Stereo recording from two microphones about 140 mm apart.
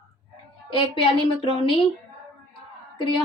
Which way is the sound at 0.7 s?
40° left (ahead or behind).